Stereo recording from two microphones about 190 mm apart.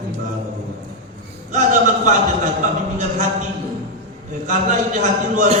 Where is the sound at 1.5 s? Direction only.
40° right (ahead or behind).